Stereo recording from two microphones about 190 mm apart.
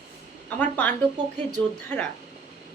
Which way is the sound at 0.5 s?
10° left (ahead or behind).